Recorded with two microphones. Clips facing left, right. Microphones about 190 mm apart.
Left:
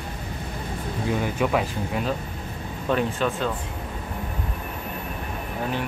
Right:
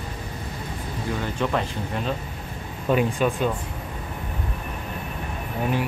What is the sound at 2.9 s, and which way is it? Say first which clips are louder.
Speech: right 2 dB; 10° right (ahead or behind).